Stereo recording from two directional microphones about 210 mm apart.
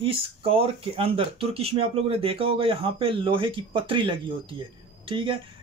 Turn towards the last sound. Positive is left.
turn(degrees=-25)  # may be behind; listen again after turning